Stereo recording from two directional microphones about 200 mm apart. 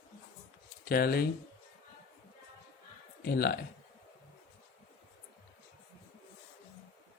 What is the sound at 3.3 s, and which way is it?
Speech, 50° left (ahead or behind).